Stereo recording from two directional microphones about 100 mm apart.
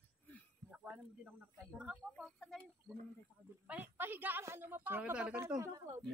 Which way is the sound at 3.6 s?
15° right (ahead or behind).